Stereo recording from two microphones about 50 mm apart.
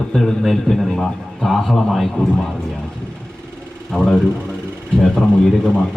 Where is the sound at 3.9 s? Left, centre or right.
Centre.